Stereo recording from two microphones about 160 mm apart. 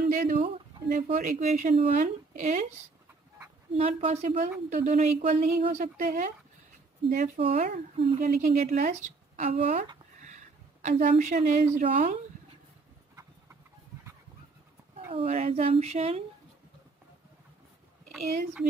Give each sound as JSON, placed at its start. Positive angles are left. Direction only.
{"t": 0.1, "sound": "speech", "side_deg": -45}
{"t": 3.7, "sound": "a woman's voice", "side_deg": -40}
{"t": 15.1, "sound": "speech", "side_deg": -40}